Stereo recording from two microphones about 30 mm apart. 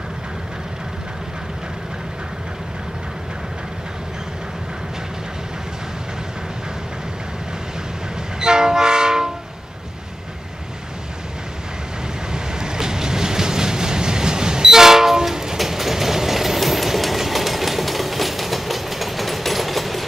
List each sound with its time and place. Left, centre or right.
8.4 s train: right
12.3 s train: right
15.5 s train: centre